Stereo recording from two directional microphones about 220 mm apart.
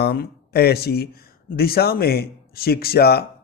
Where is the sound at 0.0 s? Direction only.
45° left (ahead or behind).